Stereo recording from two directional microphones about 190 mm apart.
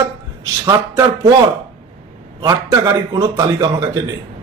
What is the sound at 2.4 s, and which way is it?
A man's voice, 20° right (ahead or behind).